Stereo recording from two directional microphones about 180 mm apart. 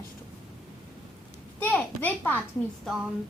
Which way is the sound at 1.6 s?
10° left (ahead or behind).